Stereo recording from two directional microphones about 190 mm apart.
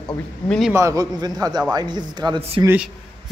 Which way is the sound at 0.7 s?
15° right (ahead or behind).